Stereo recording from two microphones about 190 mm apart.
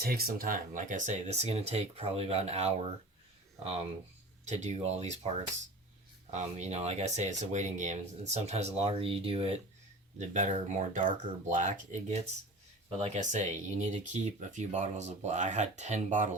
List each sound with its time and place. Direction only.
0.0 s speech: 55° right (ahead or behind); by 2.9 s 35° right (ahead or behind)
4.4 s speech: 35° right (ahead or behind)